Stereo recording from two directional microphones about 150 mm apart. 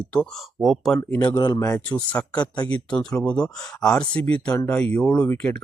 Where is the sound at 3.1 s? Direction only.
5° left (ahead or behind).